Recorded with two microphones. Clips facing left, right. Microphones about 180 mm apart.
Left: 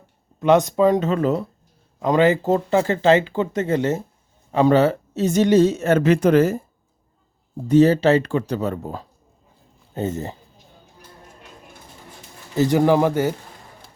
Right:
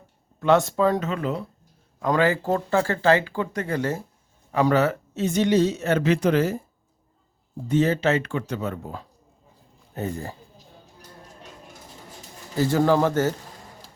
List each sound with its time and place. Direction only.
0.3 s a man's voice: 20° left (ahead or behind)
1.0 s speech: 40° left (ahead or behind)
2.0 s speech: 20° left (ahead or behind); by 6.6 s 50° left (ahead or behind)
7.7 s speech: 35° left (ahead or behind)
9.9 s speech: 25° left (ahead or behind)
12.5 s a man's voice: 15° left (ahead or behind)